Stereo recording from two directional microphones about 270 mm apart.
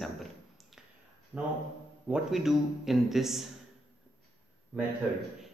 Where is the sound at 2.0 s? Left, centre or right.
Centre.